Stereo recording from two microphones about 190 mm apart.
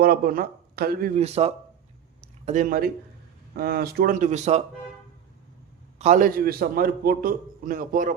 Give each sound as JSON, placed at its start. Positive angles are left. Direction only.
{"t": 0.0, "sound": "a man's voice", "side_deg": -50}
{"t": 1.2, "sound": "a man's voice", "side_deg": -35}
{"t": 6.0, "sound": "a man's voice", "side_deg": -40}